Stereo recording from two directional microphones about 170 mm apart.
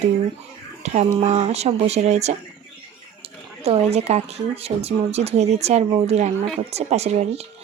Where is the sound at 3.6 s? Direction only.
40° right (ahead or behind).